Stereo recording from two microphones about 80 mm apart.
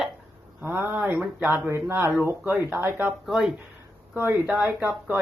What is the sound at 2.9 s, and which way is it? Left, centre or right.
Speech, right.